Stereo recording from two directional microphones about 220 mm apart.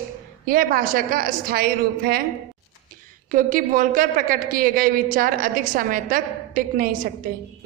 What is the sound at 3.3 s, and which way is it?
A woman's voice, 35° right (ahead or behind).